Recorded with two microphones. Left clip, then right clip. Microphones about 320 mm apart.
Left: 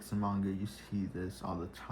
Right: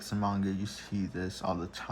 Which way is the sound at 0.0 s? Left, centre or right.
Right.